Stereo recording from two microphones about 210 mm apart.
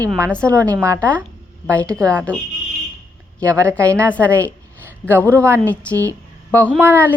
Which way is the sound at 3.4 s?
15° right (ahead or behind).